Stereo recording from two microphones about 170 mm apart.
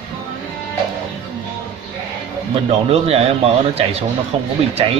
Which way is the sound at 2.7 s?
40° right (ahead or behind).